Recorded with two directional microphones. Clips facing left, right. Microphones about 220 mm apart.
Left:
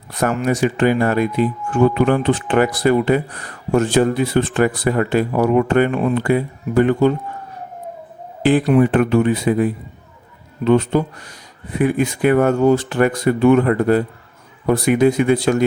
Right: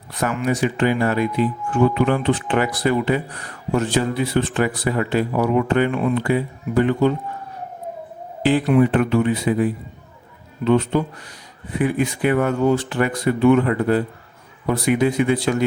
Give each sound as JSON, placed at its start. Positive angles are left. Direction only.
{"t": 0.1, "sound": "speech", "side_deg": 45}
{"t": 8.4, "sound": "speech", "side_deg": 45}
{"t": 10.7, "sound": "speech", "side_deg": 45}